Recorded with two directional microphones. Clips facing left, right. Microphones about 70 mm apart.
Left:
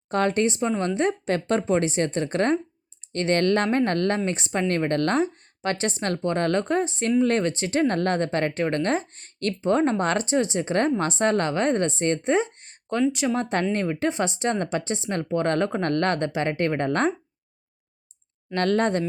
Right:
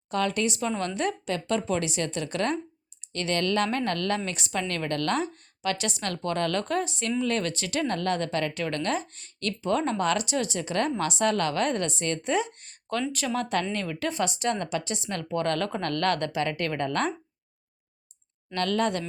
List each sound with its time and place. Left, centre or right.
0.1 s a woman's voice: left
18.5 s a woman's voice: left